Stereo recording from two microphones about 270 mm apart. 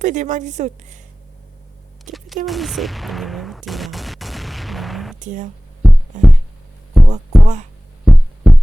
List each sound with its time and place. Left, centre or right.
0.0 s a woman's voice: right
2.1 s speech: centre
3.7 s gunshot: centre
5.2 s speech: right
5.8 s heart sounds: centre
7.1 s music: right
8.0 s heart sounds: centre